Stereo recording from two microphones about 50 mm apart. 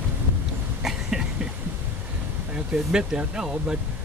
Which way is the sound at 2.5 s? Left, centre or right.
Centre.